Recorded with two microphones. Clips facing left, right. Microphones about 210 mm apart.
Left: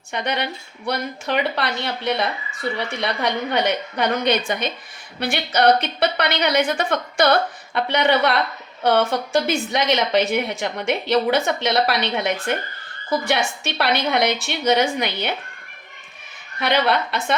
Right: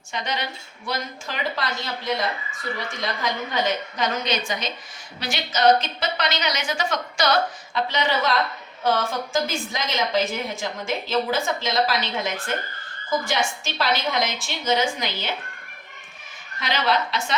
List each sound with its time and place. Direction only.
0.1 s a woman's voice: 60° left (ahead or behind)
16.6 s speech: 60° left (ahead or behind)